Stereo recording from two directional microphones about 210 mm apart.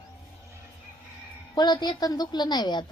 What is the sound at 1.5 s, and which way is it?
A woman's voice, 20° left (ahead or behind).